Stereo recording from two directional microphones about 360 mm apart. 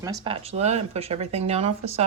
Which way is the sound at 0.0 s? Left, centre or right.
Centre.